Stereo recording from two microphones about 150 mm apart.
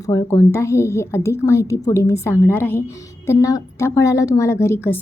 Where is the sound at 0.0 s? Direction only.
20° left (ahead or behind).